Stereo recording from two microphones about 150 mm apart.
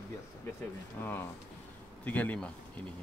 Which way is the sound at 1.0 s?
15° left (ahead or behind).